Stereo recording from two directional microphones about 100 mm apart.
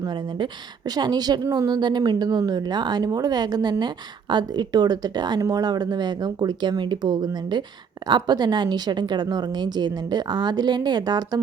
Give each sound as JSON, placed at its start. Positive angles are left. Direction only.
{"t": 0.1, "sound": "a woman's voice", "side_deg": -50}